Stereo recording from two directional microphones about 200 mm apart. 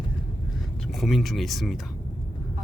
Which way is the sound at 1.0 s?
Centre (ahead or behind).